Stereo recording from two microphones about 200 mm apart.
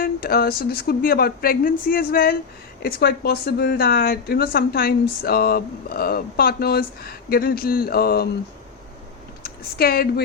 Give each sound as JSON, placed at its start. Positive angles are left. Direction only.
{"t": 0.0, "sound": "a woman's voice", "side_deg": 50}
{"t": 9.7, "sound": "a woman's voice", "side_deg": 50}